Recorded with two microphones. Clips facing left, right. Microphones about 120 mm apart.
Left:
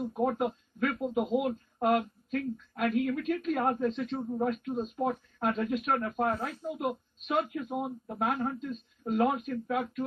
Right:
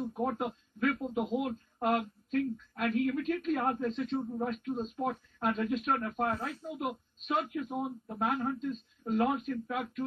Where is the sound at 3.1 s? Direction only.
15° left (ahead or behind).